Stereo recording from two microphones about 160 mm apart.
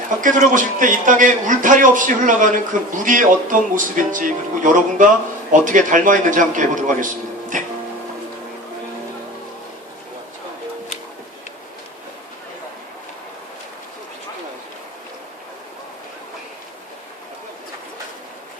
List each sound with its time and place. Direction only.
0.2 s a man's voice: 55° right (ahead or behind)